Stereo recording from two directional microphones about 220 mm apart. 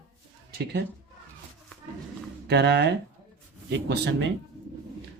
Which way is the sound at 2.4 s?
50° right (ahead or behind).